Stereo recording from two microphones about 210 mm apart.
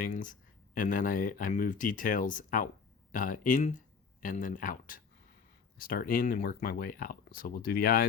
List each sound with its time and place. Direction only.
0.0 s speech: 40° left (ahead or behind)